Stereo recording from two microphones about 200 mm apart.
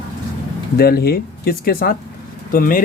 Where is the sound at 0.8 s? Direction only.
50° left (ahead or behind).